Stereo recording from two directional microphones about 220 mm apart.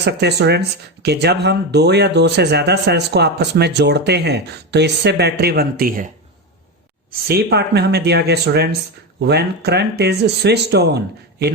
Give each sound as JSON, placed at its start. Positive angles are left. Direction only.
{"t": 0.0, "sound": "speech", "side_deg": -50}
{"t": 7.1, "sound": "speech", "side_deg": -45}